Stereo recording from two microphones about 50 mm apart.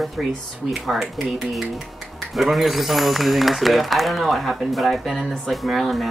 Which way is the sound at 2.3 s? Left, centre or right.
Centre.